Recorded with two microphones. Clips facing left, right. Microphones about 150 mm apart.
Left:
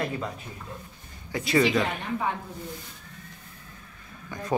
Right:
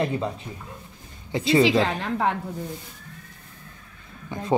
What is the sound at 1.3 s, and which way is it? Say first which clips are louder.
Speech: right 4 dB; 25° right (ahead or behind).